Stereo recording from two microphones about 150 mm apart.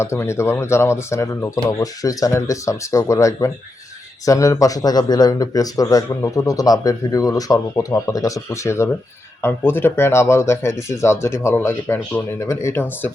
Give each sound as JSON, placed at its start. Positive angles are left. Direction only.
{"t": 0.0, "sound": "speech", "side_deg": 20}